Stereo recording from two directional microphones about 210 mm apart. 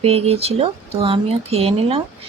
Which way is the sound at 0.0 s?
30° right (ahead or behind).